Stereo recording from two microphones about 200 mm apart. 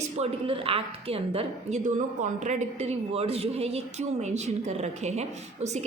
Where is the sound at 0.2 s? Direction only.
25° right (ahead or behind).